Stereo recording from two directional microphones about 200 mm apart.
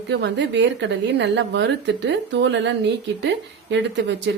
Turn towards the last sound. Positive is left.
turn(degrees=-65)  # may be behind; listen again after turning